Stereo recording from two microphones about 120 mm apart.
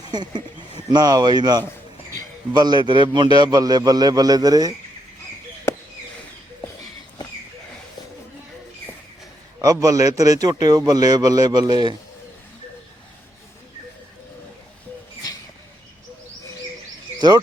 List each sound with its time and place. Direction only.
0.1 s speech: 35° right (ahead or behind)
9.6 s speech: 30° right (ahead or behind)
17.2 s speech: 40° right (ahead or behind)